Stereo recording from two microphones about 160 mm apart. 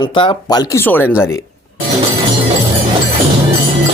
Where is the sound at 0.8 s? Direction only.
15° left (ahead or behind).